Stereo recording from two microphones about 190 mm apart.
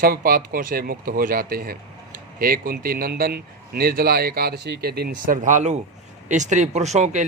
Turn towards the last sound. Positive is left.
turn(degrees=-35)  # may be behind; listen again after turning